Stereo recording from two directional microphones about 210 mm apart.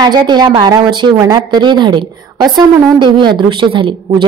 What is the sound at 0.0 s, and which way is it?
A woman's voice, 20° right (ahead or behind).